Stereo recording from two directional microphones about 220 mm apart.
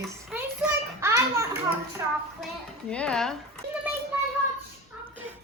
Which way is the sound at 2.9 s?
5° left (ahead or behind).